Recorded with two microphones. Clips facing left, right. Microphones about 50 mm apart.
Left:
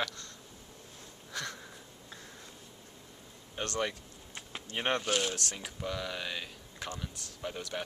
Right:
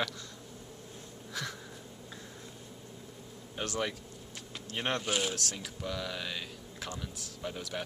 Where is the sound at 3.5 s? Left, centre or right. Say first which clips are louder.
Left 1 dB; centre.